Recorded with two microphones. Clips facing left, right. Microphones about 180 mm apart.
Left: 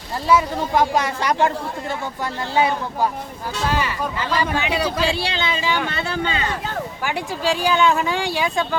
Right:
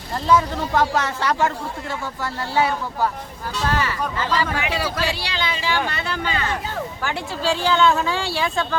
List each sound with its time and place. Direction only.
0.3 s speech: 10° left (ahead or behind)